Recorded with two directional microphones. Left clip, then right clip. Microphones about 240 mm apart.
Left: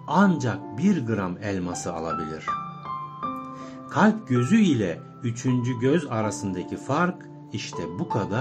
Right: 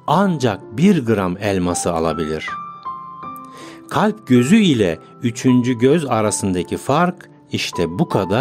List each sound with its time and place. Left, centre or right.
0.0 s speech: right
3.9 s speech: right